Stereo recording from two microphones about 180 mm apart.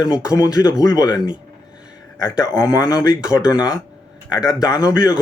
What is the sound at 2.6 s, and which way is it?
Speech, 20° left (ahead or behind).